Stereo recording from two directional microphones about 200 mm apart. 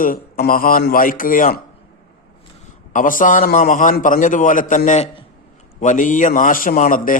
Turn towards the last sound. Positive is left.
turn(degrees=45)  # may be behind; listen again after turning